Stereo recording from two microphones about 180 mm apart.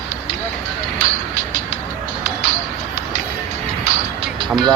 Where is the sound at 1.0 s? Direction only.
45° right (ahead or behind).